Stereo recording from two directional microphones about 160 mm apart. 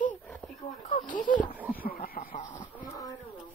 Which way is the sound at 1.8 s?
65° left (ahead or behind).